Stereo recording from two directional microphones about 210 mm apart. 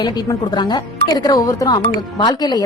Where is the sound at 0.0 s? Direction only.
20° left (ahead or behind).